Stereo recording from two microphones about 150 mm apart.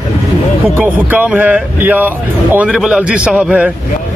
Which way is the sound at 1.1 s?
10° right (ahead or behind).